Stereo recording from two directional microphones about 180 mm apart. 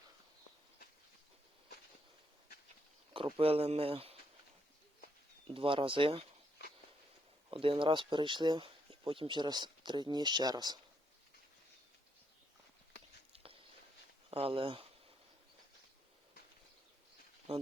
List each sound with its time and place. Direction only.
3.1 s speech: 30° right (ahead or behind)
5.5 s speech: 30° right (ahead or behind)
6.6 s a sound: 65° left (ahead or behind)
7.5 s speech: 30° right (ahead or behind)
13.3 s walk: 30° right (ahead or behind)
14.3 s speech: 30° right (ahead or behind)
17.5 s speech: 35° right (ahead or behind)